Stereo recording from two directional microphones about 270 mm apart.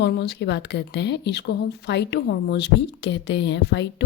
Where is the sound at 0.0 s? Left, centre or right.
Left.